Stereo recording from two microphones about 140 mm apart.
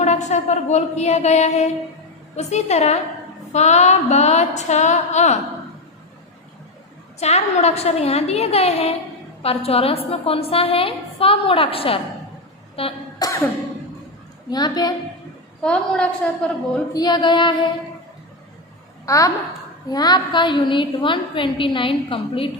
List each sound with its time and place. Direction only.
0.0 s a woman's voice: 55° left (ahead or behind)
3.5 s a sound: 55° left (ahead or behind)
7.2 s a woman's voice: 50° left (ahead or behind)
13.2 s cough: 25° left (ahead or behind)
14.5 s a woman's voice: 30° left (ahead or behind)
15.6 s a woman's voice: 5° left (ahead or behind)
16.9 s a woman's voice: 30° left (ahead or behind)
19.0 s a woman's voice: 25° left (ahead or behind)